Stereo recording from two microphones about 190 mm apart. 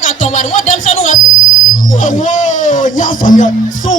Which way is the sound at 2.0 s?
40° left (ahead or behind).